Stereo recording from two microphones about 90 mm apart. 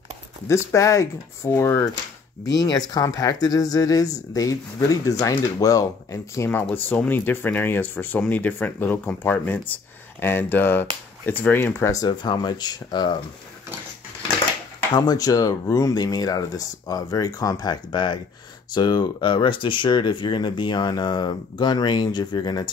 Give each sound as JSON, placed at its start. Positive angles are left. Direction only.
{"t": 0.7, "sound": "speech", "side_deg": 35}
{"t": 2.5, "sound": "speech", "side_deg": 45}
{"t": 6.7, "sound": "speech", "side_deg": 20}
{"t": 11.9, "sound": "speech", "side_deg": 50}
{"t": 15.0, "sound": "speech", "side_deg": 45}